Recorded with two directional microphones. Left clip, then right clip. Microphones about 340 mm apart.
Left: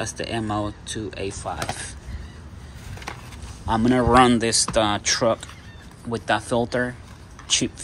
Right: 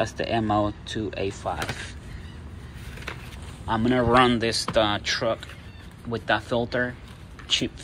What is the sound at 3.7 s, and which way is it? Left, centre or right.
Speech, centre.